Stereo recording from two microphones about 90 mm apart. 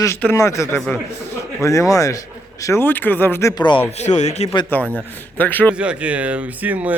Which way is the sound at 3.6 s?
60° left (ahead or behind).